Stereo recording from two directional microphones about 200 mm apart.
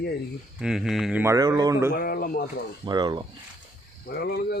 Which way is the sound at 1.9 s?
50° left (ahead or behind).